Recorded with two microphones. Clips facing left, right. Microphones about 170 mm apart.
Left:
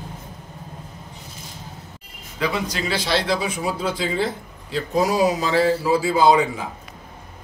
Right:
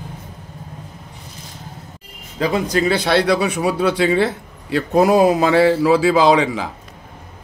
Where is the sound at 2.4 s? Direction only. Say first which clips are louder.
Right 6 dB; 50° right (ahead or behind); by 6.6 s 90° right.